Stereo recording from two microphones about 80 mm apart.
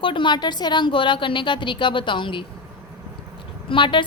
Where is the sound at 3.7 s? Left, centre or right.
Left.